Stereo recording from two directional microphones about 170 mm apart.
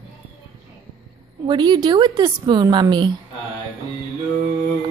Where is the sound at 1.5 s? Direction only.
25° right (ahead or behind).